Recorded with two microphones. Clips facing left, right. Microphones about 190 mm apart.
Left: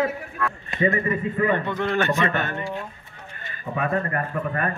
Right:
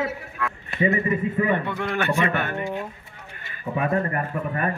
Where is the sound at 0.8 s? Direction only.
15° right (ahead or behind).